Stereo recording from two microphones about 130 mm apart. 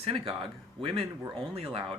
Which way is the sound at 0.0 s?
45° right (ahead or behind).